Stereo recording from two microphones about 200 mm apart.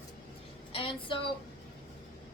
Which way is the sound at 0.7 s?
25° left (ahead or behind).